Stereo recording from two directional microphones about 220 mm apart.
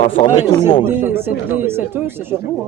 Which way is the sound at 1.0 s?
10° right (ahead or behind).